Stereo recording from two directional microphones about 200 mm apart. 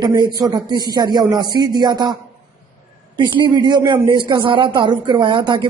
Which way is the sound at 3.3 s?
20° right (ahead or behind).